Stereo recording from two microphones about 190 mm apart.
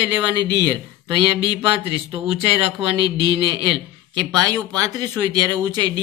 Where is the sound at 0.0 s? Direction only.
25° right (ahead or behind).